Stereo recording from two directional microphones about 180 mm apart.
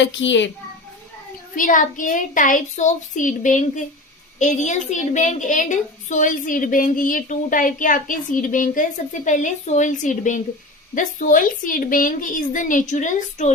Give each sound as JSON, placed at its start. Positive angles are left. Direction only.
{"t": 0.0, "sound": "a child's voice", "side_deg": 90}
{"t": 1.5, "sound": "a woman's voice", "side_deg": 50}